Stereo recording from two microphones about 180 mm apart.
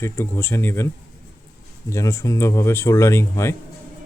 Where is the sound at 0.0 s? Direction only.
10° left (ahead or behind).